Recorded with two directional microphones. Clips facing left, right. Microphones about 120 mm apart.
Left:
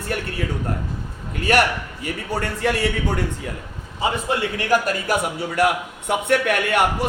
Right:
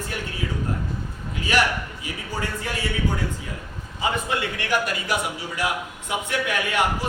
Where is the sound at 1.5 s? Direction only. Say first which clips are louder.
Left 4 dB; 55° left (ahead or behind).